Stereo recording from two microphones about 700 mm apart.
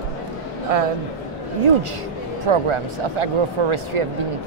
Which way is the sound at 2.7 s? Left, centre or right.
Right.